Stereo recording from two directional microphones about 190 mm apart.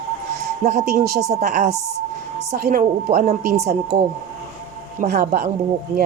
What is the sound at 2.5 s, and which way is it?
Speech, 55° right (ahead or behind).